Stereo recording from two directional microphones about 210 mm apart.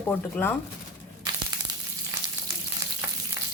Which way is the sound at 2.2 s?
20° right (ahead or behind).